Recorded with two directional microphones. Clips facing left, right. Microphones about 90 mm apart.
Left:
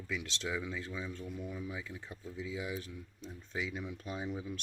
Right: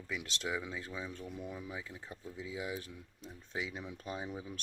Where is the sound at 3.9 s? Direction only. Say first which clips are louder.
Even; 35° right (ahead or behind).